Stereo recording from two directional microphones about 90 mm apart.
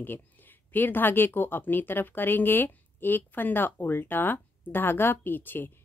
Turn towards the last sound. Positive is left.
turn(degrees=20)  # may be behind; listen again after turning